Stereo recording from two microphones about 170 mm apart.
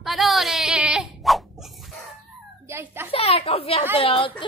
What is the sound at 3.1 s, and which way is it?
A woman's voice, 35° left (ahead or behind).